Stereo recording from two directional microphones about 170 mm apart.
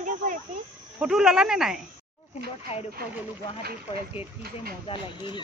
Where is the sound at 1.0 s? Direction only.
5° right (ahead or behind).